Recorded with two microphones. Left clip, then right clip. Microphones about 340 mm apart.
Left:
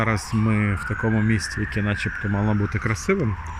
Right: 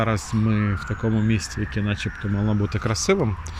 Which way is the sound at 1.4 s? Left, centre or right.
Centre.